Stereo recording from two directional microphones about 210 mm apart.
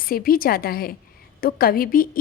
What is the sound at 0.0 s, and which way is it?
A woman's voice, 45° left (ahead or behind).